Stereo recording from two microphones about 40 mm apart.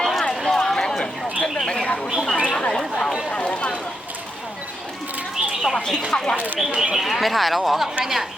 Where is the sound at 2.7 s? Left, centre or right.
Centre.